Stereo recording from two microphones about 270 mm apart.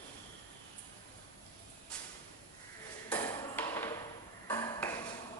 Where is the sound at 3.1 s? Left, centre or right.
Centre.